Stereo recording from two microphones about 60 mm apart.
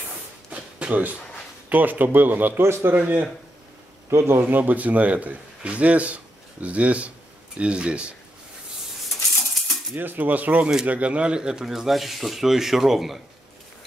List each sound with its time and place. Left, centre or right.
0.5 s a sound: right
1.7 s speech: right
2.6 s speech: right
4.1 s a man's voice: right
4.4 s a man's voice: right
9.9 s a man's voice: right; by 13.2 s centre